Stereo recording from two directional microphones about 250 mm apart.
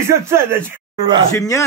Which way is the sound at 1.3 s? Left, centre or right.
Centre.